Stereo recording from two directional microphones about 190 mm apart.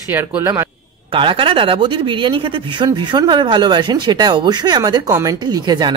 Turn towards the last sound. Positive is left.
turn(degrees=-20)  # may be behind; listen again after turning